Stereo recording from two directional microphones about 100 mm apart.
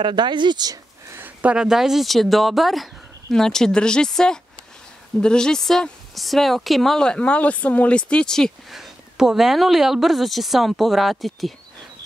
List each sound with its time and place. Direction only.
0.0 s speech: 50° right (ahead or behind)
1.1 s speech: 15° right (ahead or behind); by 11.5 s centre (ahead or behind)